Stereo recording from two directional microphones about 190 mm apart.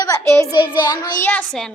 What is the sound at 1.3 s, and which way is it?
Speech, 5° left (ahead or behind).